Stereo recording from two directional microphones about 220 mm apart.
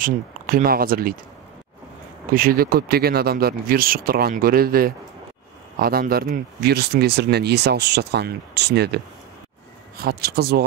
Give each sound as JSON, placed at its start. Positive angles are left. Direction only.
{"t": 0.0, "sound": "speech", "side_deg": -40}
{"t": 2.3, "sound": "speech", "side_deg": -40}